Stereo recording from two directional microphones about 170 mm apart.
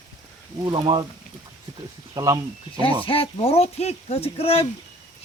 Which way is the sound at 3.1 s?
35° left (ahead or behind).